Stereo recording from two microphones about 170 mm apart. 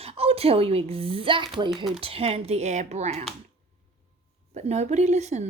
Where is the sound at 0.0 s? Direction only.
35° right (ahead or behind).